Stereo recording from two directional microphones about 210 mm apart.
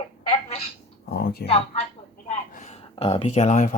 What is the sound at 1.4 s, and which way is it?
Speech, 30° left (ahead or behind).